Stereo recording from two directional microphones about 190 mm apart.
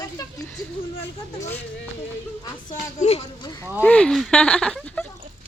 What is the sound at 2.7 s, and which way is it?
Speech, 35° left (ahead or behind).